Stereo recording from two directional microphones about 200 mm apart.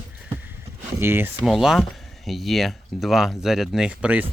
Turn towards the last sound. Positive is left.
turn(degrees=-5)  # may be behind; listen again after turning